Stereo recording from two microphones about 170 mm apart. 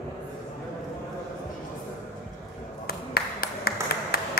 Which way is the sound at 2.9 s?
65° left (ahead or behind).